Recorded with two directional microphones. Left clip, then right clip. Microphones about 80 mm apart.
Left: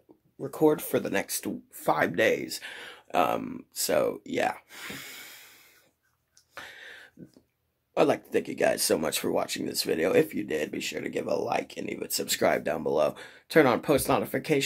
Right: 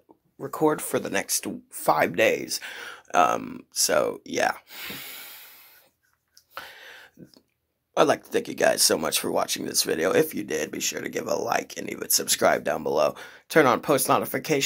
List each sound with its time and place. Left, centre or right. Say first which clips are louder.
0.4 s speech: even; left
4.6 s snort: right 3 dB; left
6.5 s a sound: right 3 dB; left
7.9 s speech: right 3 dB; centre
9.0 s speech: right 2 dB; left
9.4 s speech: right 4 dB; centre